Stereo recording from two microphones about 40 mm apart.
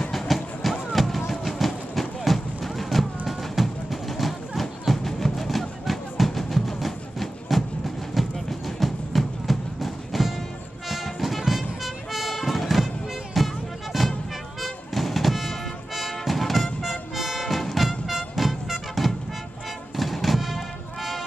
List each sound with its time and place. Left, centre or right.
0.1 s music: centre